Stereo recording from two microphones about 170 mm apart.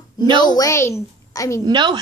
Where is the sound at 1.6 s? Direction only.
25° right (ahead or behind).